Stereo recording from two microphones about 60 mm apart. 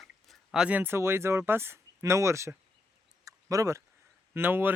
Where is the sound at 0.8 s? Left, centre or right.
Right.